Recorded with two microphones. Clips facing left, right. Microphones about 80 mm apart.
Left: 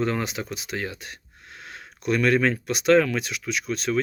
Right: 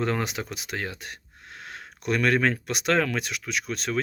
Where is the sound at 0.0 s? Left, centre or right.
Right.